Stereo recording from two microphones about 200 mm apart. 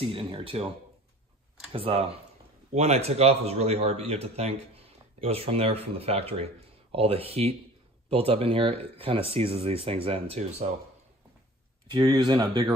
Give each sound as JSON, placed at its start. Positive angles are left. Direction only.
{"t": 0.0, "sound": "speech", "side_deg": -30}
{"t": 1.7, "sound": "a man's voice", "side_deg": -30}
{"t": 11.9, "sound": "speech", "side_deg": -20}